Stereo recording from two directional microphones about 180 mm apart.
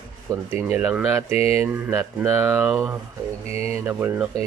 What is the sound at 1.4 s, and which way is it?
Mantra, 35° left (ahead or behind).